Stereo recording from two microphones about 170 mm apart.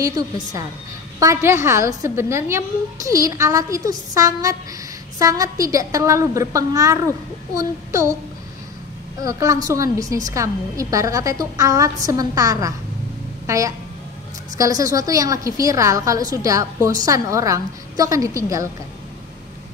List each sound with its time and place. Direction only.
0.0 s a woman's voice: 20° right (ahead or behind)
9.2 s a woman's voice: 20° right (ahead or behind)